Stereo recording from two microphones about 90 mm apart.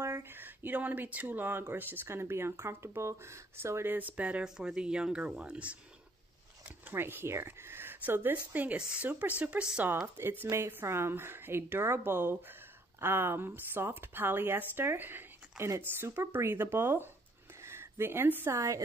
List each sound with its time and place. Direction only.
0.0 s speech: 30° right (ahead or behind)
6.9 s speech: 25° right (ahead or behind)
10.0 s speech: 25° right (ahead or behind)